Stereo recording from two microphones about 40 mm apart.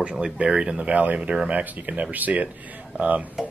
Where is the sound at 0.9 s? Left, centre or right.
Right.